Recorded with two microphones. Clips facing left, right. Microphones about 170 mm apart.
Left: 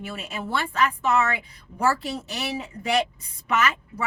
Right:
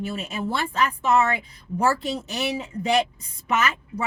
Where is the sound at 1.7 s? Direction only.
20° right (ahead or behind).